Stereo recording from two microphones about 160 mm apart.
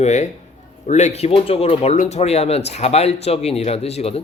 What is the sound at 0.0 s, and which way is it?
A man's voice, 45° left (ahead or behind).